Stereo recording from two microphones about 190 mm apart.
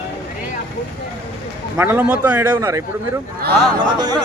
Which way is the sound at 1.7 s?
10° right (ahead or behind).